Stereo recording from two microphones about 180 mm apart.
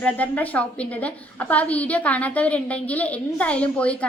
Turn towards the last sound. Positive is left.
turn(degrees=5)  # may be behind; listen again after turning